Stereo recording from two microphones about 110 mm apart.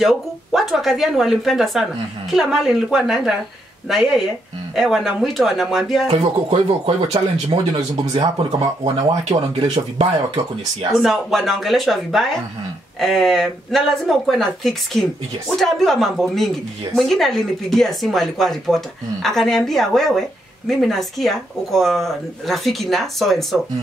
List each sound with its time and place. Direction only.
0.0 s speech: centre (ahead or behind)
6.0 s speech: 70° right (ahead or behind); by 8.9 s 50° right (ahead or behind)
9.3 s speech: 40° right (ahead or behind)
10.9 s speech: centre (ahead or behind)